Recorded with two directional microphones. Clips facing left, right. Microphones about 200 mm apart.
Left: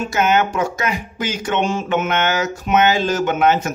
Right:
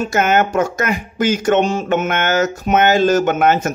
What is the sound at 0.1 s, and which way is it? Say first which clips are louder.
Speech: right 1 dB; 50° right (ahead or behind).